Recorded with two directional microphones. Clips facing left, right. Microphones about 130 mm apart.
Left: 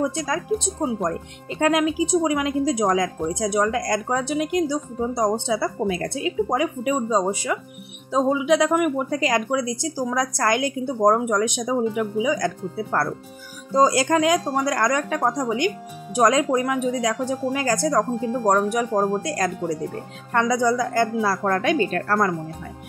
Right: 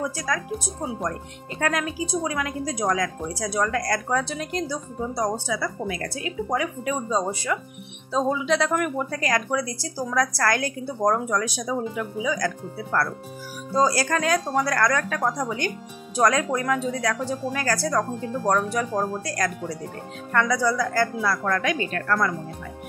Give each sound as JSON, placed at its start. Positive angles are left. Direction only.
{"t": 0.0, "sound": "speech", "side_deg": 25}